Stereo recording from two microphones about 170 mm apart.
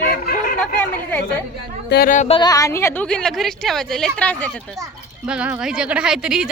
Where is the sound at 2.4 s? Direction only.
20° left (ahead or behind).